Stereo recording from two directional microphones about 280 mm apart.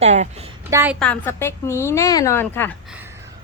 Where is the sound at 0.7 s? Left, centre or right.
Centre.